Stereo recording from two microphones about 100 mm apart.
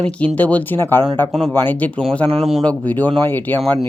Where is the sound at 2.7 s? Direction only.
15° left (ahead or behind).